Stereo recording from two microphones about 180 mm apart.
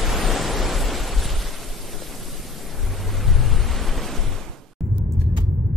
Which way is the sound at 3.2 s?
Centre (ahead or behind).